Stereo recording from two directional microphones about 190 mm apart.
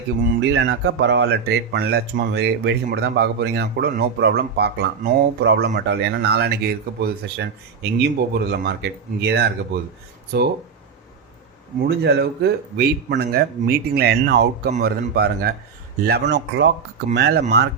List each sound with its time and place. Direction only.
0.3 s speech: 70° right (ahead or behind)
11.8 s speech: 60° right (ahead or behind)